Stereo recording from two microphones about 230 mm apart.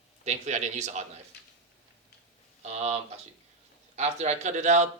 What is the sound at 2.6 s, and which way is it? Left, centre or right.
A man's voice, right.